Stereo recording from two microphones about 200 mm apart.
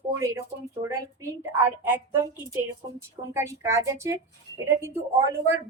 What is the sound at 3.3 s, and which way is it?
Speech, 15° right (ahead or behind).